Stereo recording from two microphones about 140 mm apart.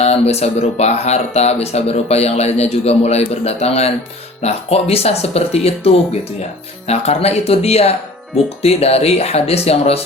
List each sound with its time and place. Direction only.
0.0 s speech: 50° left (ahead or behind)